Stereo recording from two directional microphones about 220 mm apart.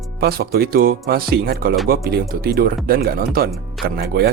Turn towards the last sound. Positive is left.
turn(degrees=-45)  # may be behind; listen again after turning